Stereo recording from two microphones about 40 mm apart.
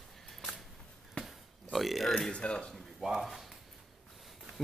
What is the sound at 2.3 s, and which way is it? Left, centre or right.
Speech, left.